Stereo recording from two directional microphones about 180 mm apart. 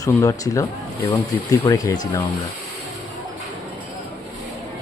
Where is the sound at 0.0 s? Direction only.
20° left (ahead or behind).